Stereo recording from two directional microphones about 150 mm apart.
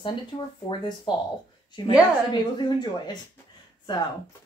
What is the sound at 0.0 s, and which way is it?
Speech, 30° left (ahead or behind).